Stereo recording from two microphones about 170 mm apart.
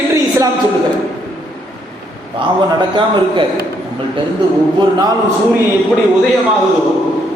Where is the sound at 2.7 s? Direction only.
30° right (ahead or behind).